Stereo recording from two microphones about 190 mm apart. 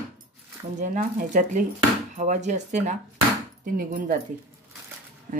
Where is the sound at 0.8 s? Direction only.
40° right (ahead or behind).